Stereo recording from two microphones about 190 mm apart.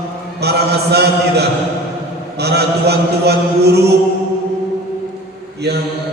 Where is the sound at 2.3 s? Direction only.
60° right (ahead or behind).